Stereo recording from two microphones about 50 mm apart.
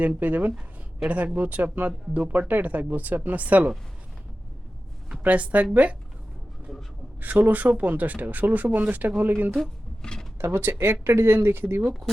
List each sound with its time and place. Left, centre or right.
0.0 s speech: right
5.2 s speech: right
7.2 s speech: right
10.0 s a sound: centre
10.3 s speech: right